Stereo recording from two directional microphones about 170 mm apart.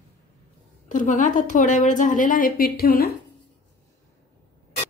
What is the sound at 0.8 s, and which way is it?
A woman's voice, 50° left (ahead or behind).